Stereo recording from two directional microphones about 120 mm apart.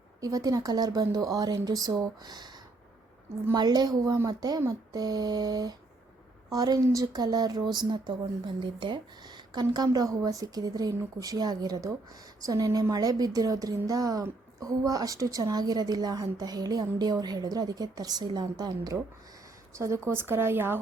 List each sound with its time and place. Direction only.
0.2 s speech: 30° right (ahead or behind)
3.5 s speech: 35° right (ahead or behind); by 20.7 s 20° right (ahead or behind)